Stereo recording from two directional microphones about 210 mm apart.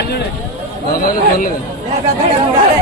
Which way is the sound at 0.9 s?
45° left (ahead or behind).